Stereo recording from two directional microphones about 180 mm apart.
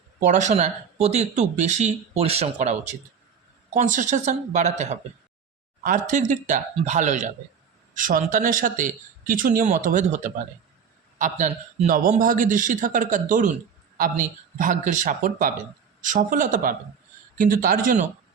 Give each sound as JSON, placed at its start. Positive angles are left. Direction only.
{"t": 0.2, "sound": "a man's voice", "side_deg": -45}